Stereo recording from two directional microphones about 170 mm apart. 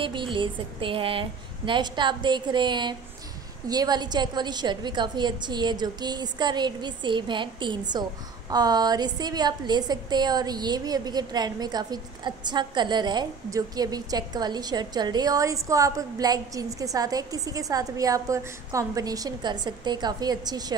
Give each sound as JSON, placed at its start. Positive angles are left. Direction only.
{"t": 0.0, "sound": "a woman's voice", "side_deg": -30}